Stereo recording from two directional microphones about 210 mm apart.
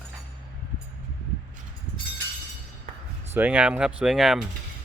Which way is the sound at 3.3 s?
5° right (ahead or behind).